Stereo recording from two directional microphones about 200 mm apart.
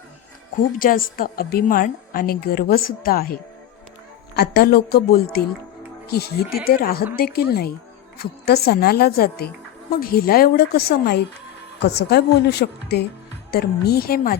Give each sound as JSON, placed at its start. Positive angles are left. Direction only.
{"t": 0.8, "sound": "a woman's voice", "side_deg": 45}